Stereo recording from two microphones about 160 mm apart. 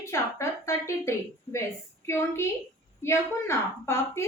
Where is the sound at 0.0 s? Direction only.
20° left (ahead or behind).